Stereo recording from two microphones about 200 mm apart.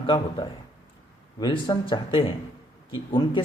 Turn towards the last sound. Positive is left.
turn(degrees=20)  # may be behind; listen again after turning